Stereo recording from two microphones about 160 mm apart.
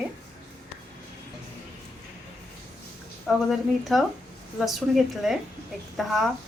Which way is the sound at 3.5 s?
Centre (ahead or behind).